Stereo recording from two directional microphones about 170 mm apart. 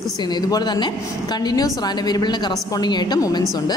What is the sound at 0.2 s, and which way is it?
A woman's voice, 25° left (ahead or behind).